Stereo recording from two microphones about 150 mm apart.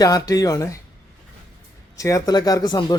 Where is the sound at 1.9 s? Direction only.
20° left (ahead or behind).